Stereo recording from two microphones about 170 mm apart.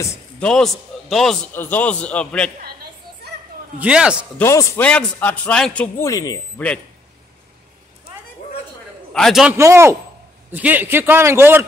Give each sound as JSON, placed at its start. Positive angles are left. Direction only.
{"t": 0.0, "sound": "a man's voice", "side_deg": 15}
{"t": 0.5, "sound": "a man's voice", "side_deg": 0}
{"t": 3.8, "sound": "a man's voice", "side_deg": -5}
{"t": 4.4, "sound": "a man's voice", "side_deg": 15}
{"t": 6.0, "sound": "speech", "side_deg": 20}
{"t": 9.1, "sound": "a man's voice", "side_deg": 0}
{"t": 9.6, "sound": "a man's voice", "side_deg": -15}